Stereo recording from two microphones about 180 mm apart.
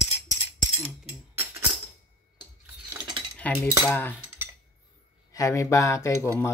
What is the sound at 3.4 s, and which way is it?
Speech, 10° left (ahead or behind).